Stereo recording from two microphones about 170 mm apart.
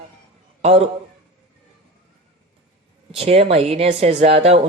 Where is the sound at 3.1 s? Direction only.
35° right (ahead or behind).